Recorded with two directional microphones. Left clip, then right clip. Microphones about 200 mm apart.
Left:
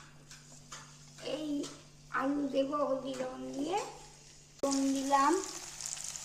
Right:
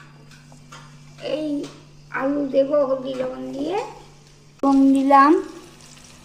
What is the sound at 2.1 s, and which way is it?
A woman's voice, 15° left (ahead or behind).